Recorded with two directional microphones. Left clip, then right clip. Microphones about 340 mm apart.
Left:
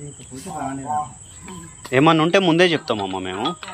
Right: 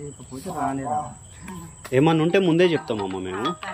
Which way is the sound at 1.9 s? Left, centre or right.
Centre.